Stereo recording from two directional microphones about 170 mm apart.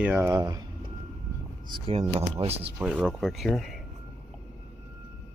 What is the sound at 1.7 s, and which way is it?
Speech, 30° right (ahead or behind).